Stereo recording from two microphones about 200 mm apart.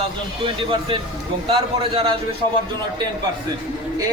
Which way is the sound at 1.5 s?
25° right (ahead or behind).